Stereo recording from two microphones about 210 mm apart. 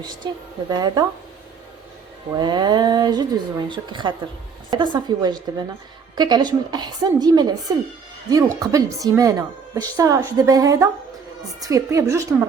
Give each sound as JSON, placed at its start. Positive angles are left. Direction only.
{"t": 0.0, "sound": "speech", "side_deg": -20}
{"t": 2.3, "sound": "speech", "side_deg": -20}